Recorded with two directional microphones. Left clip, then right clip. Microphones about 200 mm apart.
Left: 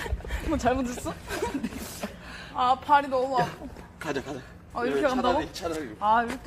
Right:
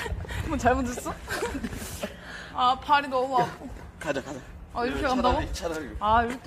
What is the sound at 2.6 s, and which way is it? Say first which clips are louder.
Speech: left 1 dB; 40° right (ahead or behind).